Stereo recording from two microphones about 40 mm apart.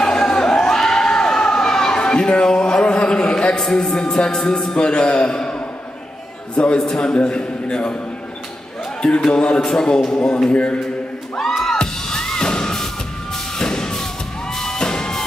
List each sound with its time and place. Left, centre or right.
0.0 s a sound: centre
3.6 s a man's voice: centre
9.2 s a man's voice: left
11.7 s music: centre
13.6 s a sound: centre
14.6 s music: centre